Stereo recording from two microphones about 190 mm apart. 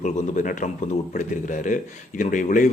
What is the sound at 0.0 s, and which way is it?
A man's voice, 40° left (ahead or behind).